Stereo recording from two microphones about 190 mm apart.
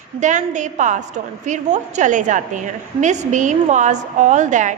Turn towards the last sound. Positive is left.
turn(degrees=-40)  # may be behind; listen again after turning